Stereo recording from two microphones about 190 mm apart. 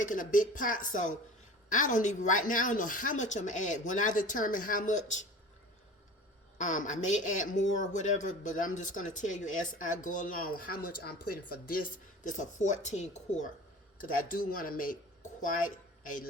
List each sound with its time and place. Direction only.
0.0 s a woman's voice: 45° left (ahead or behind)
6.6 s a woman's voice: 40° left (ahead or behind)